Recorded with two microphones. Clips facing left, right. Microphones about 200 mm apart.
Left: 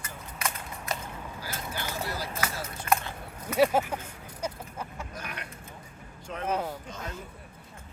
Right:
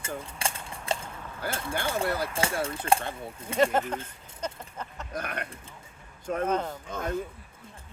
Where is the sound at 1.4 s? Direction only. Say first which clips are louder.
Right 7 dB; 55° right (ahead or behind).